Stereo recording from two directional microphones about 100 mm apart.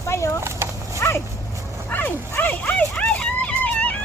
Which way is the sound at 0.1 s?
25° left (ahead or behind).